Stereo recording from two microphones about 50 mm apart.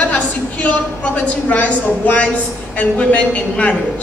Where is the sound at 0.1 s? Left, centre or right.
Left.